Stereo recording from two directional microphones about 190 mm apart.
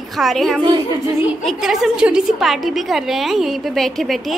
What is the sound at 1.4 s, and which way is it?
A woman's voice, centre (ahead or behind).